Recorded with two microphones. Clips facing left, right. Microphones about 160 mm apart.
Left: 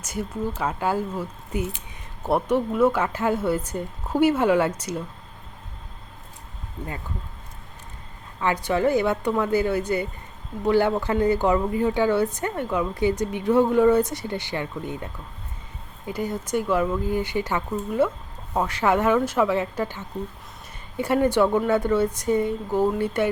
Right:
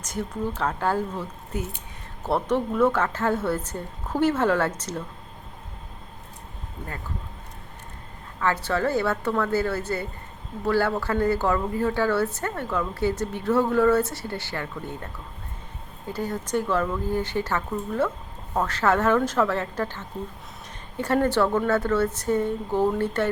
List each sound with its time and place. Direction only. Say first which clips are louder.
0.0 s a woman's voice: left 1 dB; 10° left (ahead or behind)
8.4 s a woman's voice: left 2 dB; 15° left (ahead or behind)